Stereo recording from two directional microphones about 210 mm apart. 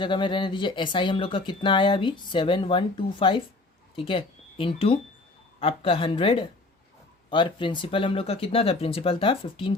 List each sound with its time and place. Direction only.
0.0 s speech: 20° left (ahead or behind)